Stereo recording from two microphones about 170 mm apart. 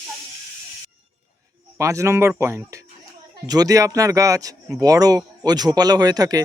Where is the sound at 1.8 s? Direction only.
15° right (ahead or behind).